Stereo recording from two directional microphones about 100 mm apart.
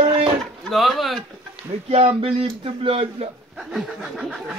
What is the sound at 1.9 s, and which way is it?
Speech, 70° right (ahead or behind).